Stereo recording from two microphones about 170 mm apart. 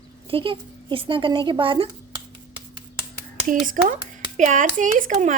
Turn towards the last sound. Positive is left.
turn(degrees=-50)  # may be behind; listen again after turning